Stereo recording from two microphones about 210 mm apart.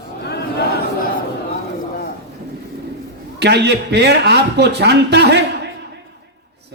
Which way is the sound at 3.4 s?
55° right (ahead or behind).